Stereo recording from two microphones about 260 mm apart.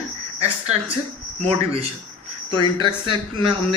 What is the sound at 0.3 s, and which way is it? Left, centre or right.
Speech, right.